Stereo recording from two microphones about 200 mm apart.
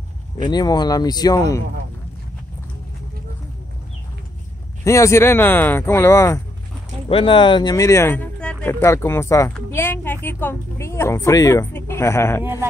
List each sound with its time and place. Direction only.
0.5 s speech: 20° left (ahead or behind)
4.8 s a woman's voice: 15° left (ahead or behind)
7.1 s a woman's voice: 25° left (ahead or behind)